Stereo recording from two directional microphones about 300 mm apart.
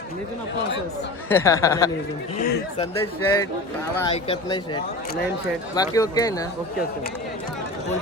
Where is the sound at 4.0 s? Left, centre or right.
Centre.